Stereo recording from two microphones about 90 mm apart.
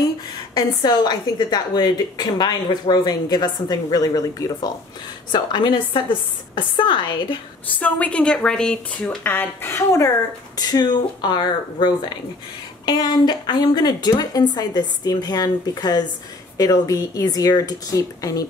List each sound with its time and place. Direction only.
0.6 s a woman's voice: 55° left (ahead or behind)
5.3 s a woman's voice: 55° left (ahead or behind)
7.8 s a woman's voice: 15° left (ahead or behind)
9.2 s speech: 25° left (ahead or behind)
10.6 s a woman's voice: 50° left (ahead or behind)